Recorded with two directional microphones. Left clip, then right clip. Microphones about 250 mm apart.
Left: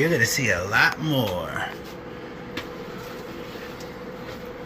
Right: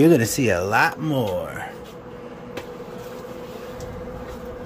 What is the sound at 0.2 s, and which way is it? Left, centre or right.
Speech, centre.